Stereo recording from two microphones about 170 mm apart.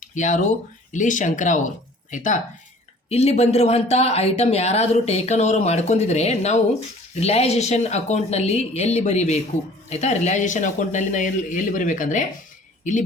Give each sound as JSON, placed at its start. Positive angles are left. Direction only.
{"t": 0.0, "sound": "speech", "side_deg": 45}
{"t": 3.1, "sound": "speech", "side_deg": 40}